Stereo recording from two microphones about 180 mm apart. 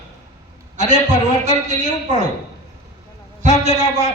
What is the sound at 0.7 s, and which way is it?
A man's voice, 40° right (ahead or behind).